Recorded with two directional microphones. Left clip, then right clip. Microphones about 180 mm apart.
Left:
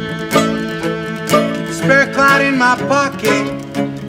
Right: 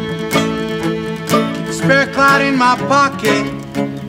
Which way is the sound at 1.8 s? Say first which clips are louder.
Left 1 dB; 35° left (ahead or behind).